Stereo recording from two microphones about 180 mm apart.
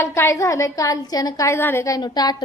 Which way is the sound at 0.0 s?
15° left (ahead or behind).